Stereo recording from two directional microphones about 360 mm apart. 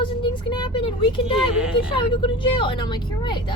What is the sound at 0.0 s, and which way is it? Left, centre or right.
Speech, centre.